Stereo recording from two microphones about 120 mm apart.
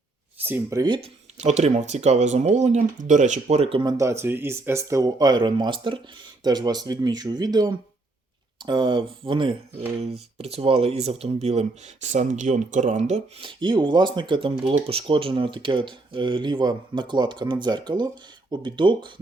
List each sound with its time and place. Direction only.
0.4 s speech: 15° right (ahead or behind)
0.8 s speech: 40° right (ahead or behind)
1.4 s speech: 70° right (ahead or behind); by 3.4 s 90° right
3.5 s speech: 55° right (ahead or behind)
3.8 s speech: 25° right (ahead or behind); by 9.6 s 45° right (ahead or behind)
10.0 s speech: 60° right (ahead or behind)
12.1 s speech: 90° right; by 13.2 s 70° right (ahead or behind)
13.4 s speech: 40° right (ahead or behind)